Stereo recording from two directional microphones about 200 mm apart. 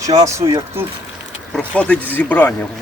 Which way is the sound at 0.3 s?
15° right (ahead or behind).